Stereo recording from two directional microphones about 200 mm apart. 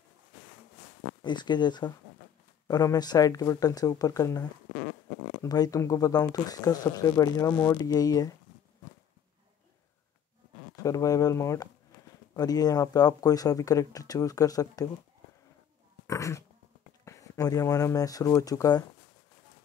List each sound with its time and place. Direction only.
1.2 s speech: 20° left (ahead or behind)
10.8 s speech: 15° left (ahead or behind)
16.1 s dog: 15° left (ahead or behind)
17.0 s speech: 15° left (ahead or behind)